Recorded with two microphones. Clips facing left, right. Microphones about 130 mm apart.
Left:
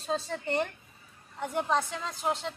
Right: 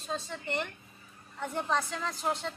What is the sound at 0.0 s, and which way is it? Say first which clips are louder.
Speech: left 5 dB; 35° left (ahead or behind).